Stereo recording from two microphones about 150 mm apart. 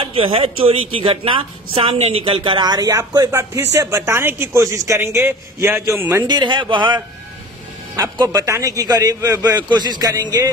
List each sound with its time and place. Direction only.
0.0 s a man's voice: 35° right (ahead or behind); by 6.2 s 15° right (ahead or behind)
6.2 s speech: 30° right (ahead or behind)